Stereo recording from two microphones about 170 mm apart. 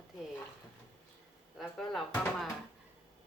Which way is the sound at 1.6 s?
Centre (ahead or behind).